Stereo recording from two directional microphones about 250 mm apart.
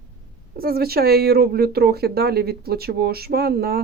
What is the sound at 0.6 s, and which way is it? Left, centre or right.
Speech, right.